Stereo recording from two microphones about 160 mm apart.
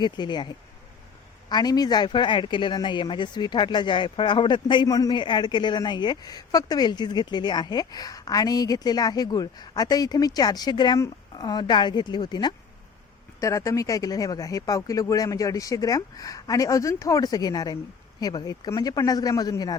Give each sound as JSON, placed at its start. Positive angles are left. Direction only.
{"t": 0.0, "sound": "speech", "side_deg": 30}